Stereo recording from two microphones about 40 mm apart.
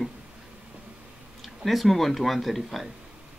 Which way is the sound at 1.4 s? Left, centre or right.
Centre.